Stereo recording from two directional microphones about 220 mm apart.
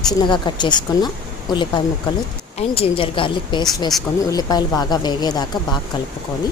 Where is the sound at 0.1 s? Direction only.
20° left (ahead or behind).